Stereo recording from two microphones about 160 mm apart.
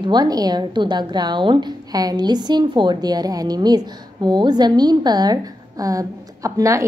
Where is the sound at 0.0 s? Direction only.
25° right (ahead or behind).